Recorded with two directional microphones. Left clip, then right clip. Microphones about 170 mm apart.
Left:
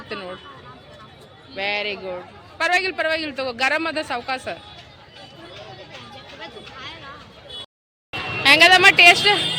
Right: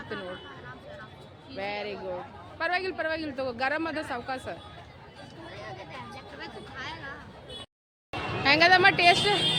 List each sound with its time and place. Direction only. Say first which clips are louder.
1.5 s a man's voice: left 9 dB; 10° left (ahead or behind)
6.4 s a sound: left 3 dB; 25° right (ahead or behind)
8.4 s speech: left 8 dB; centre (ahead or behind)